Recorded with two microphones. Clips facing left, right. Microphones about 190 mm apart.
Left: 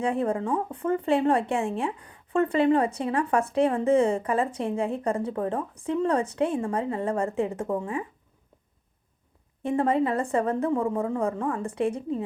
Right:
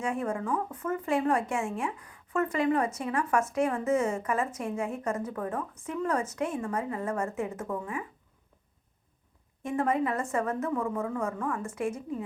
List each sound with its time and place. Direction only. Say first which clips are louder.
0.0 s a woman's voice: left 5 dB; 35° left (ahead or behind)
9.6 s a woman's voice: left 4 dB; 30° left (ahead or behind)